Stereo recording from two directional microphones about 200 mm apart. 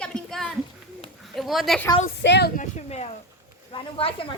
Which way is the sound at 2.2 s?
60° left (ahead or behind).